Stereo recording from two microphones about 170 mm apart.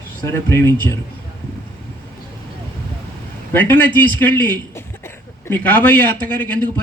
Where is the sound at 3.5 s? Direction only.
10° left (ahead or behind).